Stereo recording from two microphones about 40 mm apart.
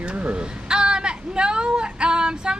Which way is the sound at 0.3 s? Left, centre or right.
Right.